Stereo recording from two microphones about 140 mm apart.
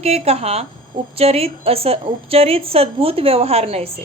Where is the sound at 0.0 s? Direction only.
45° right (ahead or behind).